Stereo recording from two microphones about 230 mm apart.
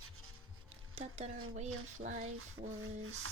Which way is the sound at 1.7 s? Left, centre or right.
Right.